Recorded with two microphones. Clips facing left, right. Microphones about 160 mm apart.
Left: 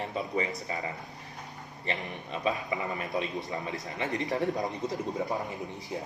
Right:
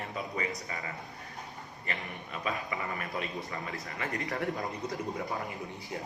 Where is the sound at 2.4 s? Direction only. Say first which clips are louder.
Left 4 dB; 20° left (ahead or behind).